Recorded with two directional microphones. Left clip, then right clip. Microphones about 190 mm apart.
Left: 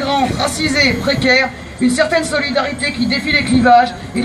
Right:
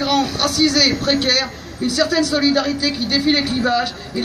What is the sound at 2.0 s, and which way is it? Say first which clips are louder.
Speech: left 2 dB; 30° right (ahead or behind).